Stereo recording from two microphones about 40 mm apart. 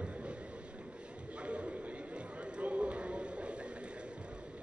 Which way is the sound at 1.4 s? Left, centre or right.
Right.